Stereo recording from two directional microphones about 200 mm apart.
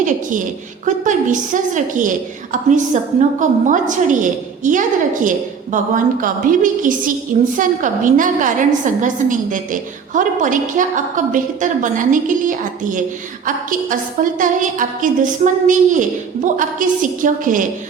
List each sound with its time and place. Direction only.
0.0 s a woman's voice: 40° right (ahead or behind)